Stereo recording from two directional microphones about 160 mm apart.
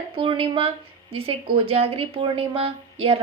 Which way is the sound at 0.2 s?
30° right (ahead or behind).